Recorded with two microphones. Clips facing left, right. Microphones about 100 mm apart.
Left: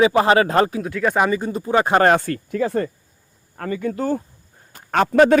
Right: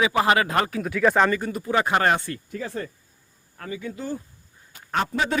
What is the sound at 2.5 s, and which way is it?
Speech, 65° left (ahead or behind).